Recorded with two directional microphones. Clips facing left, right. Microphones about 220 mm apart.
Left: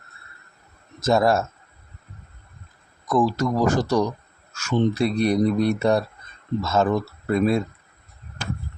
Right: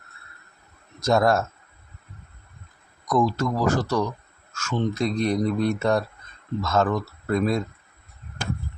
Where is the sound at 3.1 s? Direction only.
5° left (ahead or behind).